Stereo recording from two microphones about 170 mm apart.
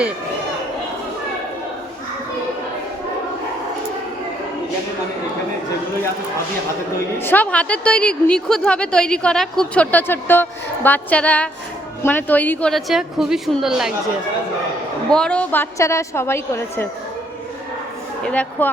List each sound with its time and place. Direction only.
7.2 s a woman's voice: 10° left (ahead or behind)
15.1 s a woman's voice: 5° left (ahead or behind)
18.3 s a woman's voice: 5° left (ahead or behind)